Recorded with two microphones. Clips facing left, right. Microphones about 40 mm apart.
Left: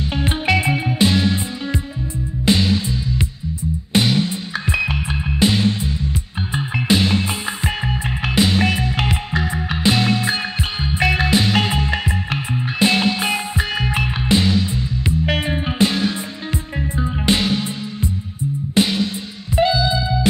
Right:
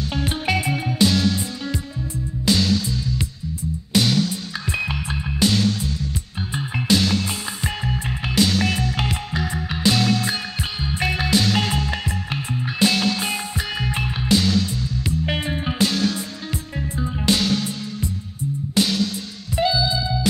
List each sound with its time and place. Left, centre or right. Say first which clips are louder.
0.1 s music: left 4 dB; left